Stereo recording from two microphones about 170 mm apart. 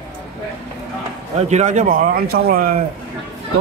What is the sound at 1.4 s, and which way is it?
A man's voice, 40° right (ahead or behind).